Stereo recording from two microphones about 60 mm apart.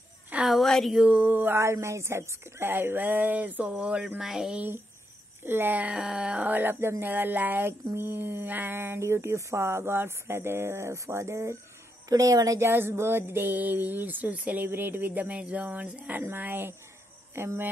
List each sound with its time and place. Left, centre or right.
0.5 s a sound: centre
1.0 s speech: right
1.5 s speech: right
4.2 s speech: centre
5.4 s speech: right
5.9 s speech: centre; by 11.5 s right
12.1 s speech: right
12.5 s speech: right
16.3 s speech: right